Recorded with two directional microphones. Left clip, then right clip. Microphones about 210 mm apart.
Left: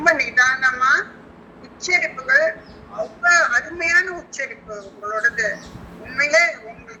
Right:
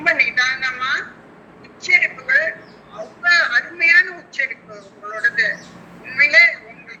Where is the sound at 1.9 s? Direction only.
Centre (ahead or behind).